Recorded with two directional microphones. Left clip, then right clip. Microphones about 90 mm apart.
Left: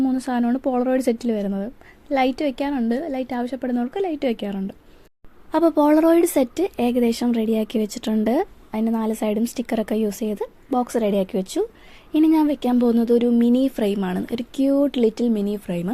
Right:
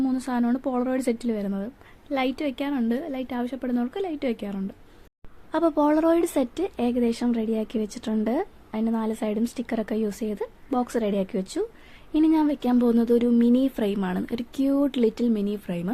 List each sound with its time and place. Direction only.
0.0 s speech: 30° left (ahead or behind)
2.0 s speech: 35° left (ahead or behind)
12.7 s speech: 20° left (ahead or behind)